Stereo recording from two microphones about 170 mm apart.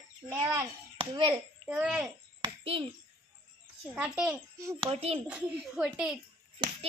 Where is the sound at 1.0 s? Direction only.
30° right (ahead or behind).